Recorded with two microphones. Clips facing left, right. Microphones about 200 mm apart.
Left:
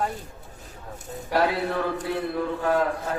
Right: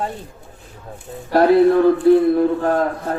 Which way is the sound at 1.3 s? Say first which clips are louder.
Right 12 dB; 40° right (ahead or behind).